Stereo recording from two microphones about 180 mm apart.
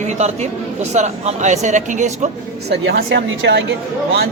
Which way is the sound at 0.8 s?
40° right (ahead or behind).